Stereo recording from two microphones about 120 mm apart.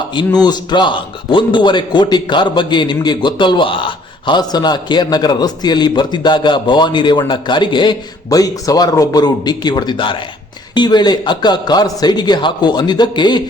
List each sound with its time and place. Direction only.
0.1 s a man's voice: 35° left (ahead or behind)